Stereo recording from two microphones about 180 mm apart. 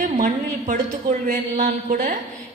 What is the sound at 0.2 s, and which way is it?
A woman's voice, 45° right (ahead or behind).